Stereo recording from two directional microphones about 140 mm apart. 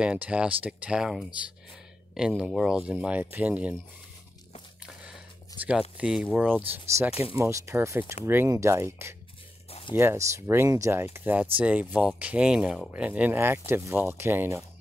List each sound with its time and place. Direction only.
0.0 s speech: 10° right (ahead or behind)
5.6 s speech: 10° right (ahead or behind)
9.7 s a sound: 45° left (ahead or behind)
9.9 s speech: 20° right (ahead or behind)